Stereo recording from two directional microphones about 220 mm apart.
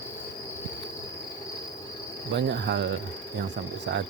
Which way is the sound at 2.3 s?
55° right (ahead or behind).